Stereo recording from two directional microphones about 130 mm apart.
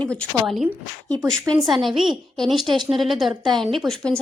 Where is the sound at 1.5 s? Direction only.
25° right (ahead or behind).